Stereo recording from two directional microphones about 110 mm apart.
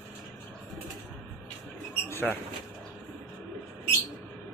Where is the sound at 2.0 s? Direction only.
20° left (ahead or behind).